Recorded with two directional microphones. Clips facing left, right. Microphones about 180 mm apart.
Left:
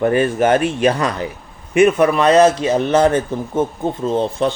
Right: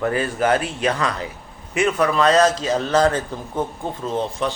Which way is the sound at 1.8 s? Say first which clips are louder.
Left 6 dB; 20° left (ahead or behind).